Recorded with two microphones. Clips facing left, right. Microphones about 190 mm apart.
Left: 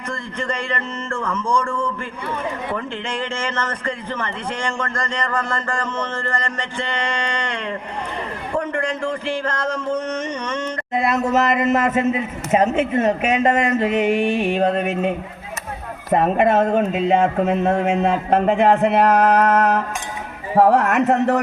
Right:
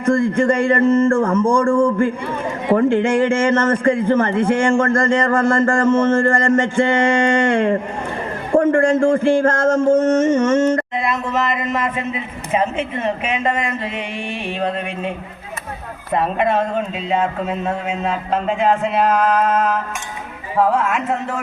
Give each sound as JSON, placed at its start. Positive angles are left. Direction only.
{"t": 0.0, "sound": "a man's voice", "side_deg": -50}
{"t": 11.2, "sound": "a man's voice", "side_deg": 45}
{"t": 20.8, "sound": "a man's voice", "side_deg": 70}